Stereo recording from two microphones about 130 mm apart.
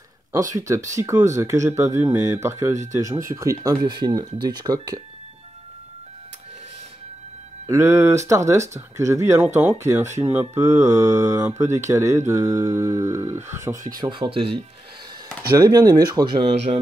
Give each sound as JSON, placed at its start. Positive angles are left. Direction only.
{"t": 0.3, "sound": "speech", "side_deg": -25}
{"t": 7.6, "sound": "speech", "side_deg": -25}
{"t": 14.0, "sound": "speech", "side_deg": -35}
{"t": 15.5, "sound": "speech", "side_deg": -30}
{"t": 16.4, "sound": "speech", "side_deg": -50}